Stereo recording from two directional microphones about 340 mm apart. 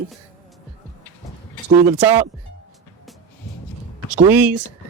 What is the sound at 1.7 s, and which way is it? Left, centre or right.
Speech, centre.